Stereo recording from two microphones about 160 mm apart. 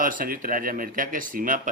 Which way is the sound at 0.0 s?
60° right (ahead or behind).